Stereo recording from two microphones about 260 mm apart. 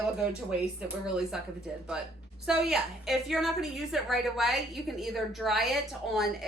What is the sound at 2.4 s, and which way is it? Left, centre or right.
Speech, centre.